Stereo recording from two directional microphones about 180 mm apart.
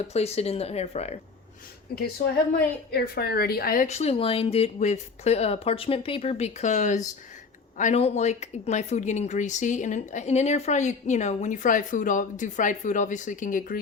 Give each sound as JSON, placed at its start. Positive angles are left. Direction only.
{"t": 0.1, "sound": "speech", "side_deg": 35}
{"t": 2.9, "sound": "speech", "side_deg": 60}